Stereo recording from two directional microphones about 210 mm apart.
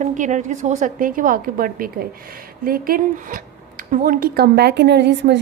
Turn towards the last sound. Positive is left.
turn(degrees=-55)  # may be behind; listen again after turning